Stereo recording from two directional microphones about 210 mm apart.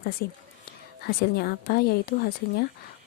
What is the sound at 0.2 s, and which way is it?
A woman's voice, 50° left (ahead or behind).